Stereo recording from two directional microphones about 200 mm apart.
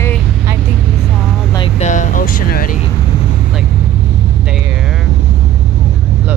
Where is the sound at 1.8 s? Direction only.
40° left (ahead or behind).